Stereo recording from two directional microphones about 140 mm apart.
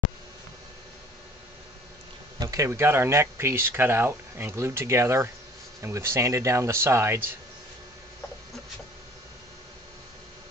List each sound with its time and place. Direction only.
2.3 s speech: 25° right (ahead or behind)